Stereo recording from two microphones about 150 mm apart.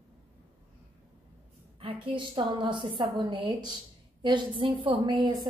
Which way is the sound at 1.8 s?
35° right (ahead or behind).